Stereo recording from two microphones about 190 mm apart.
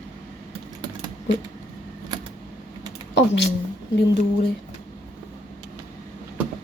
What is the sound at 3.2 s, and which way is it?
Speech, 65° left (ahead or behind).